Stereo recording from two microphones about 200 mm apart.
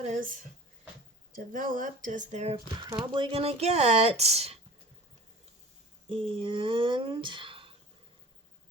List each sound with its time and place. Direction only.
0.0 s speech: 35° right (ahead or behind)
1.5 s speech: 45° right (ahead or behind)
2.7 s speech: 25° right (ahead or behind)
6.1 s speech: 25° right (ahead or behind)